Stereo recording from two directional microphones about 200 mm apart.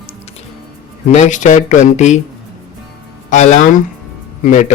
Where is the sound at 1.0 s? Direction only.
35° left (ahead or behind).